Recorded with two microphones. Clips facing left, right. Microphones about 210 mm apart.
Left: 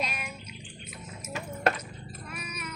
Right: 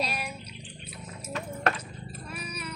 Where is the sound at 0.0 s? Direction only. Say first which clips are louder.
Right 3 dB; 35° right (ahead or behind).